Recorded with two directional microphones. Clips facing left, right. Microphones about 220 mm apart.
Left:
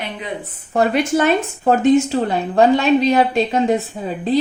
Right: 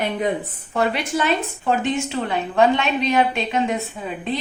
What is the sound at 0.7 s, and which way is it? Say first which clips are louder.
A woman's voice: left 6 dB; 45° left (ahead or behind).